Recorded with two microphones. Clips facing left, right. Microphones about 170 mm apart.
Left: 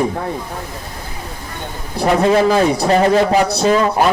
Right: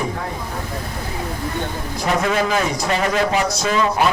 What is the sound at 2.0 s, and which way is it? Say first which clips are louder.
A man's voice: left 7 dB; 30° left (ahead or behind).